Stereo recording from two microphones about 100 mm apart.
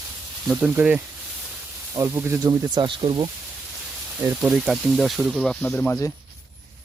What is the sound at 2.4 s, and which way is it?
Speech, 35° right (ahead or behind).